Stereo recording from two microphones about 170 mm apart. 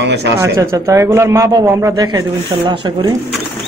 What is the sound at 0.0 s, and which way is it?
Speech, 75° right (ahead or behind).